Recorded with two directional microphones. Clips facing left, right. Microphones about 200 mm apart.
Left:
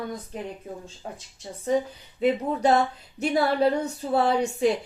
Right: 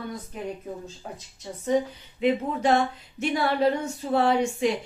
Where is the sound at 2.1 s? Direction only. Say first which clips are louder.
Left 1 dB; 35° left (ahead or behind).